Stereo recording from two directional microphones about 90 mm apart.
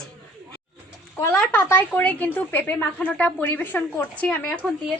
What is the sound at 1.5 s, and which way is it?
A woman's voice, 20° left (ahead or behind).